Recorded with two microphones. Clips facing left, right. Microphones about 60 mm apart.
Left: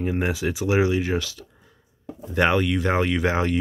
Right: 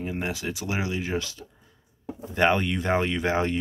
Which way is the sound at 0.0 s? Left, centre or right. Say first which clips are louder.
Left 6 dB; centre.